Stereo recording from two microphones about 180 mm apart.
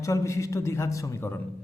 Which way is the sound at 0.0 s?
15° left (ahead or behind).